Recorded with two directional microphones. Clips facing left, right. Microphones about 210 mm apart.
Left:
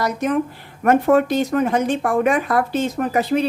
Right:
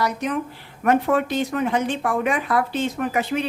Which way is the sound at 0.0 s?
45° left (ahead or behind).